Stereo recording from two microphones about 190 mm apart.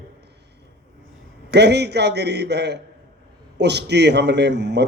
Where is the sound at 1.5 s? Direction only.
60° right (ahead or behind).